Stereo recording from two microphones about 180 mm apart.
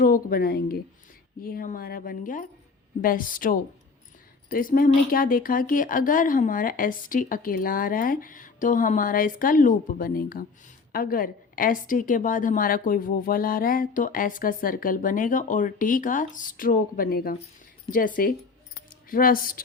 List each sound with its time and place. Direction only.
0.0 s a woman's voice: 55° left (ahead or behind)